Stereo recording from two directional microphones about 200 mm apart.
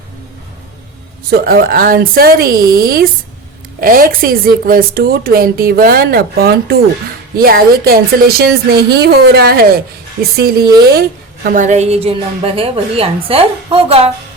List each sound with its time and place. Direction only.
1.3 s a woman's voice: 50° right (ahead or behind)
11.4 s a woman's voice: 40° right (ahead or behind)